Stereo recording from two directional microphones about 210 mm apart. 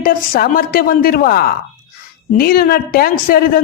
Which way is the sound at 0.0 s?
40° left (ahead or behind).